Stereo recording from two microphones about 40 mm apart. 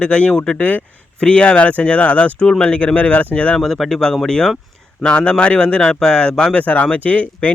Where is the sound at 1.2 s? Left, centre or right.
Left.